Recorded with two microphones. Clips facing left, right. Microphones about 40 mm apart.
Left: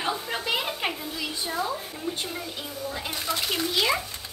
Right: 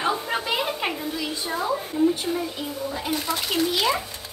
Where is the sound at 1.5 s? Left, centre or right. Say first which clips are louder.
Right 4 dB; centre.